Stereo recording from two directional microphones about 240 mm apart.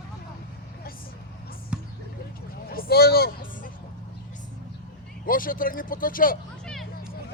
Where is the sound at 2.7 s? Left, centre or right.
Left.